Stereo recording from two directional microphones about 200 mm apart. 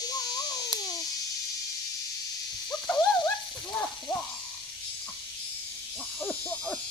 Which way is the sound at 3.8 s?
10° left (ahead or behind).